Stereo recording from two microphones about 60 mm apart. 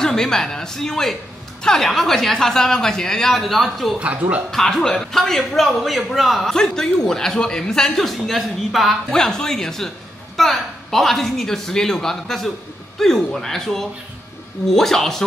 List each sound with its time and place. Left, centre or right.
0.0 s a man's voice: centre
4.0 s speech: right
4.5 s a woman's voice: centre
9.1 s a man's voice: centre